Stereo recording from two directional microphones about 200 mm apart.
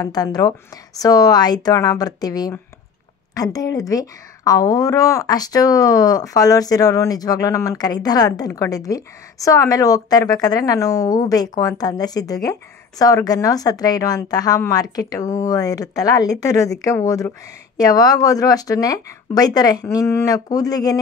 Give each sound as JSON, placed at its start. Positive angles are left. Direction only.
{"t": 0.0, "sound": "speech", "side_deg": 20}